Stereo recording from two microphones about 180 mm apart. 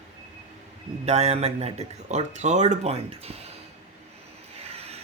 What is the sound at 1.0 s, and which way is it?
Speech, 35° right (ahead or behind).